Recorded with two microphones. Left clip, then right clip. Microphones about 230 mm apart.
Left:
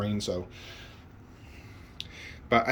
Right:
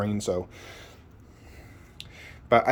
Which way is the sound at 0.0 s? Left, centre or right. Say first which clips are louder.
Right 4 dB; centre.